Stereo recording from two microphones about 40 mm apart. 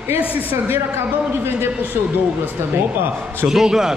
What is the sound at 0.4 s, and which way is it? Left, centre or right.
Speech, right.